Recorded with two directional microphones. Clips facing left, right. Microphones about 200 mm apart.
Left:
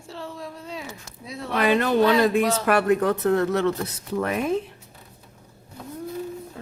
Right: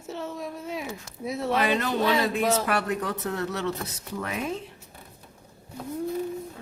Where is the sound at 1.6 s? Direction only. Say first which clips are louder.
Left 9 dB; 55° left (ahead or behind).